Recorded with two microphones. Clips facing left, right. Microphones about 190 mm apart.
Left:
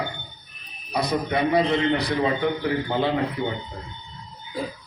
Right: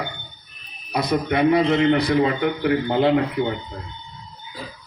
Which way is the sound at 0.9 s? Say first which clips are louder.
Right 3 dB; 60° right (ahead or behind).